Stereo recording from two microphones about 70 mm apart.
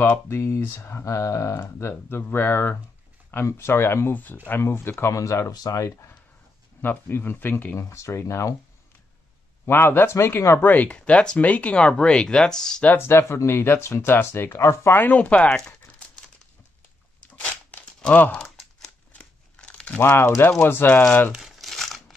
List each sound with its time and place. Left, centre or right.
0.3 s speech: left
1.6 s speech: left
5.5 s speech: left
6.8 s speech: left
7.7 s speech: left
9.7 s speech: left
10.6 s speech: left
12.9 s speech: left
15.0 s speech: left
17.2 s a sound: centre
19.1 s crumpling: centre
20.0 s speech: left
21.3 s crumpling: centre